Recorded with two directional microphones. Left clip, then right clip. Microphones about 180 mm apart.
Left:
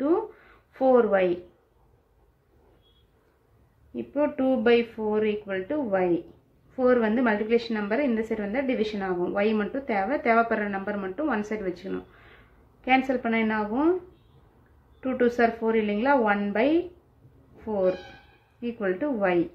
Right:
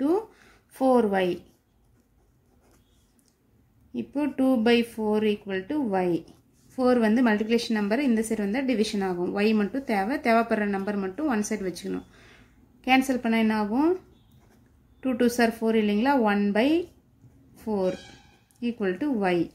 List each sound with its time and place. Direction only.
0.7 s a woman's voice: 35° right (ahead or behind)
3.9 s a woman's voice: 35° right (ahead or behind)
15.0 s a woman's voice: 35° right (ahead or behind)